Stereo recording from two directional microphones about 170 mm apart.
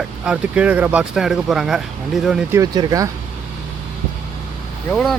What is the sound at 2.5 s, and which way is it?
Speech, 20° right (ahead or behind).